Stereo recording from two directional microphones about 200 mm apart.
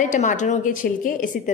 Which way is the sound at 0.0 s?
40° left (ahead or behind).